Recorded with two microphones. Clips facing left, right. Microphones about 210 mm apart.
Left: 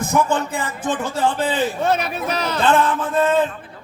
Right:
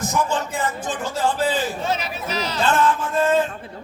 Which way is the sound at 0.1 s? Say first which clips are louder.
Left 6 dB; 60° left (ahead or behind).